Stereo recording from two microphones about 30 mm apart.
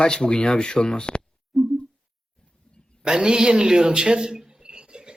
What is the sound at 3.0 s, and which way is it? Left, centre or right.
Speech, right.